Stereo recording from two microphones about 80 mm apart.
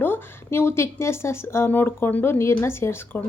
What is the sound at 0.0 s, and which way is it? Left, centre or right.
Speech, left.